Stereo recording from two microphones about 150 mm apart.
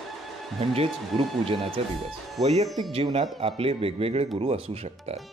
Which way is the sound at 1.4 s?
40° right (ahead or behind).